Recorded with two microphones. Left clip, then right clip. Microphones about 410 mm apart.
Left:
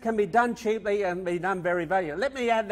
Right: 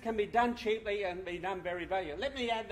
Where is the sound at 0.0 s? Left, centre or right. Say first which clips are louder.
Left 7 dB; left.